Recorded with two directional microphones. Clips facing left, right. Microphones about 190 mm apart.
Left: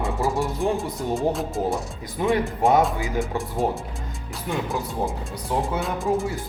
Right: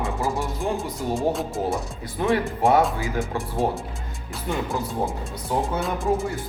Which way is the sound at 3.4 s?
Centre (ahead or behind).